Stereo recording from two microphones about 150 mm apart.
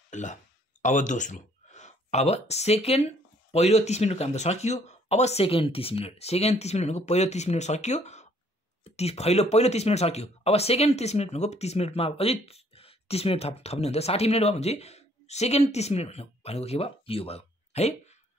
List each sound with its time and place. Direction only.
0.1 s speech: 55° left (ahead or behind)